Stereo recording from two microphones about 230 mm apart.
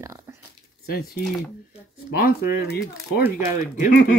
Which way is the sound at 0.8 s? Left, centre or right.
Left.